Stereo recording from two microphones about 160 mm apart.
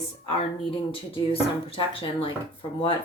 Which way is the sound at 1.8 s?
35° left (ahead or behind).